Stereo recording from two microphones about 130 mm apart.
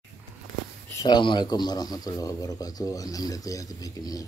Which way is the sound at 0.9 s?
35° left (ahead or behind).